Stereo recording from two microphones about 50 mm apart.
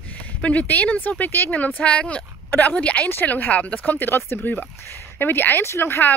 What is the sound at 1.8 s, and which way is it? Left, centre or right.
Speech, left.